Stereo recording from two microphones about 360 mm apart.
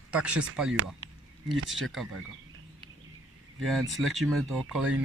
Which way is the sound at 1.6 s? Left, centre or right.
Right.